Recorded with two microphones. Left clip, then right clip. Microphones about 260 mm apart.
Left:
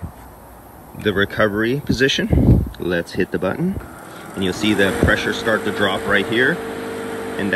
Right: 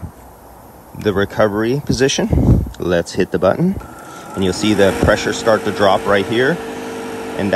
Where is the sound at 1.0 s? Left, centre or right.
Centre.